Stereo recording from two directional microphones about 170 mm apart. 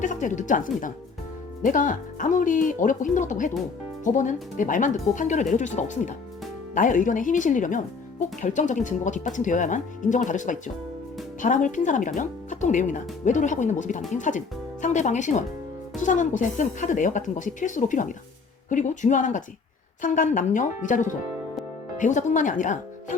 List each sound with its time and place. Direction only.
0.0 s speech: 50° left (ahead or behind)